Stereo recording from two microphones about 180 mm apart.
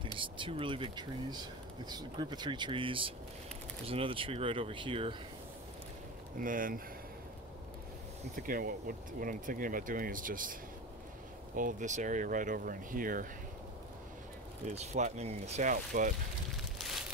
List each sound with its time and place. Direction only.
0.2 s speech: 30° right (ahead or behind)
6.3 s speech: 50° right (ahead or behind)
8.4 s speech: 50° right (ahead or behind)
14.7 s speech: 40° right (ahead or behind)
16.7 s a sound: centre (ahead or behind)